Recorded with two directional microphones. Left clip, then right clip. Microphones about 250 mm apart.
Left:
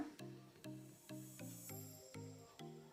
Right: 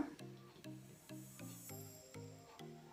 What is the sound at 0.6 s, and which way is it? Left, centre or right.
Music, centre.